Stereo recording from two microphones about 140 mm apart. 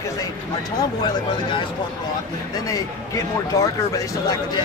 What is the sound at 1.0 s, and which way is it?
Speech, 35° left (ahead or behind).